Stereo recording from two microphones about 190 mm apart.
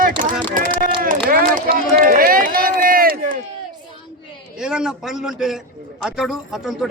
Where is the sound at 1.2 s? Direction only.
50° right (ahead or behind).